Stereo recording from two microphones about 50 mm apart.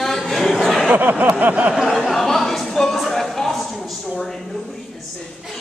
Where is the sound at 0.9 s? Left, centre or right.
Right.